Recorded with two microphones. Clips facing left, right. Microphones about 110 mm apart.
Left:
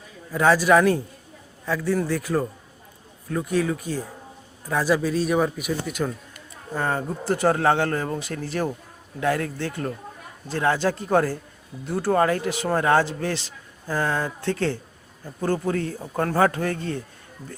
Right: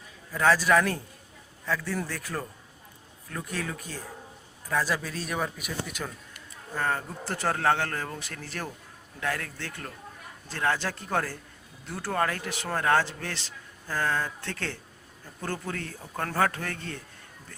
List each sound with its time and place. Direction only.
0.3 s speech: 10° left (ahead or behind)
6.7 s speech: 20° left (ahead or behind)